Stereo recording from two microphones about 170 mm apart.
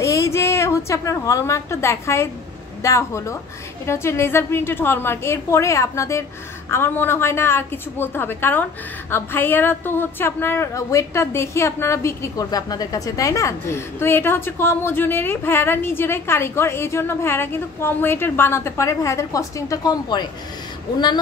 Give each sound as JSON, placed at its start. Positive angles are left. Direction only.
{"t": 0.0, "sound": "a woman's voice", "side_deg": 20}